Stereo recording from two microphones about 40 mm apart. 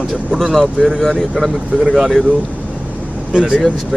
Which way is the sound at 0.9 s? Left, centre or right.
Centre.